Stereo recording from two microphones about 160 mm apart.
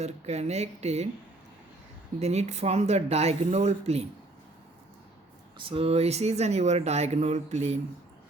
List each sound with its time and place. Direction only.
0.0 s speech: 40° right (ahead or behind)
2.1 s speech: 40° right (ahead or behind)
5.5 s speech: 35° right (ahead or behind)